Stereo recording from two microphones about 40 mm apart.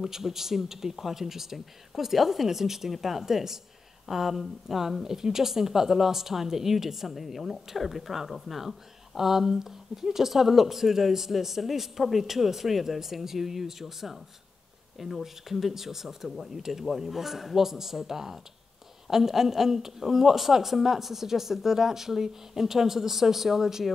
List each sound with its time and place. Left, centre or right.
0.0 s a woman's voice: centre